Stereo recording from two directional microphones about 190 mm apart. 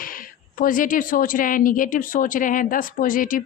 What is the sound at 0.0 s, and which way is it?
A woman's voice, 45° left (ahead or behind).